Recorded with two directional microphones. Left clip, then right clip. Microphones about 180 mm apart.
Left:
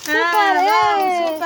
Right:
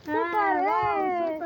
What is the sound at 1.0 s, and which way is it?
Speech, 25° left (ahead or behind).